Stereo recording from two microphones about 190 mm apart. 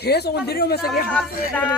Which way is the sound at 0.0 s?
60° left (ahead or behind).